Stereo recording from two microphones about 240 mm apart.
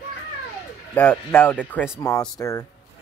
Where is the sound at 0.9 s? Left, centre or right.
Centre.